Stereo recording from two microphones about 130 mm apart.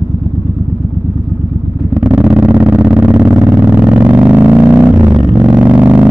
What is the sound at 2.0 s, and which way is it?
Vehicle, 5° right (ahead or behind).